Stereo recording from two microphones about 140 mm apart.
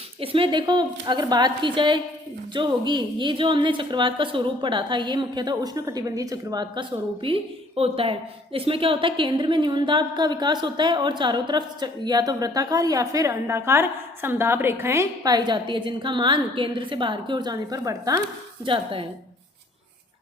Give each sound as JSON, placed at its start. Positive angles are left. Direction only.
{"t": 0.2, "sound": "a woman's voice", "side_deg": -40}
{"t": 18.6, "sound": "a woman's voice", "side_deg": -40}